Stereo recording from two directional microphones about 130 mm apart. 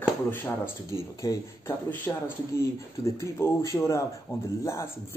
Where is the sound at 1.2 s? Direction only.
25° left (ahead or behind).